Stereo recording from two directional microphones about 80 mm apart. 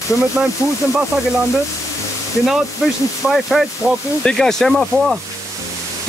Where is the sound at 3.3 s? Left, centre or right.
Centre.